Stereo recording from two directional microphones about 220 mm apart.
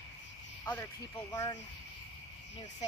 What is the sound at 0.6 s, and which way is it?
Speech, 10° left (ahead or behind).